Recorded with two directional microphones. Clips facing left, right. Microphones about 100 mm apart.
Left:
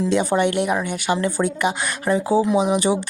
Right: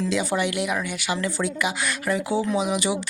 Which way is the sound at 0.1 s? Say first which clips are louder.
Left 5 dB; 45° left (ahead or behind).